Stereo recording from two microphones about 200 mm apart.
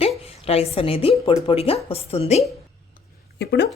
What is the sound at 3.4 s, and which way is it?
Speech, 60° left (ahead or behind).